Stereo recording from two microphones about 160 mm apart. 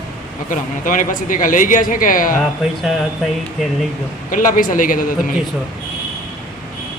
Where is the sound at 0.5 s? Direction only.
55° left (ahead or behind).